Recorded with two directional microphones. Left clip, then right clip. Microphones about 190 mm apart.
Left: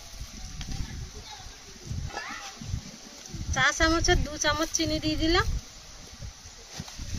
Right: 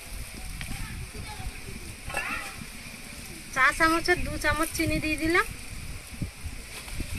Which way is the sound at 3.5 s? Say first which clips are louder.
Right 2 dB; 10° left (ahead or behind).